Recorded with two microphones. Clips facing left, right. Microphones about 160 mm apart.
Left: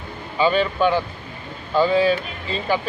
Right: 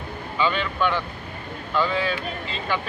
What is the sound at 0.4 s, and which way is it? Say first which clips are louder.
Speech: left 5 dB; 35° left (ahead or behind).